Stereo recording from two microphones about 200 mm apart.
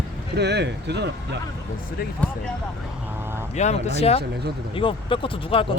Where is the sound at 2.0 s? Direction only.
50° left (ahead or behind).